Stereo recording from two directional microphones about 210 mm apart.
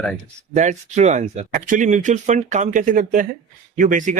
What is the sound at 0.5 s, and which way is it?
Speech, 35° right (ahead or behind).